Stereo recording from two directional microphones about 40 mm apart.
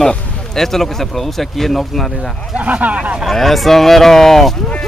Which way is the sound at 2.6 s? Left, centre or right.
Right.